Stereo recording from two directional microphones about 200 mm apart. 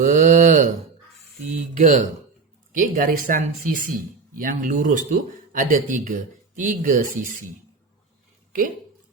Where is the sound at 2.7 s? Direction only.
45° right (ahead or behind).